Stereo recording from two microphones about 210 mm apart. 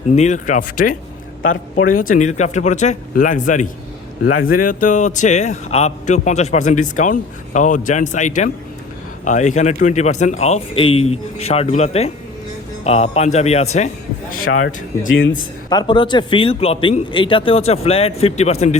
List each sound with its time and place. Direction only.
0.2 s a man's voice: 35° left (ahead or behind)
2.0 s a man's voice: 40° left (ahead or behind)
14.4 s speech: 85° left; by 15.4 s 70° left (ahead or behind)
15.7 s speech: 20° left (ahead or behind)